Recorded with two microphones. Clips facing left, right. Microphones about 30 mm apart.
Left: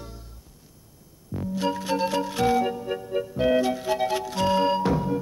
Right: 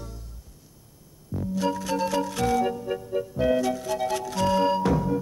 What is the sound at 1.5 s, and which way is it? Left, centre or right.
Music, left.